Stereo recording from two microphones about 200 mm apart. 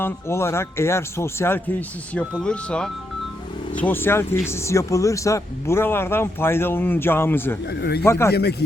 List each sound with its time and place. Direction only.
0.0 s speech: 15° left (ahead or behind)
7.7 s speech: 55° left (ahead or behind)
8.0 s speech: 15° left (ahead or behind)
8.3 s speech: 55° left (ahead or behind)